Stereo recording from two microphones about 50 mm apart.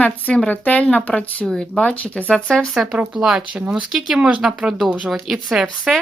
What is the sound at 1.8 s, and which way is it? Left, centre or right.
Speech, left.